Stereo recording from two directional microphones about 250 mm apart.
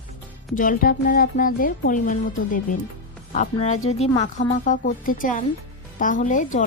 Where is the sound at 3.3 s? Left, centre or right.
Left.